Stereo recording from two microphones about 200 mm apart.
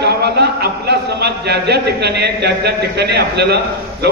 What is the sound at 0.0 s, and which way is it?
A man's voice, 55° right (ahead or behind).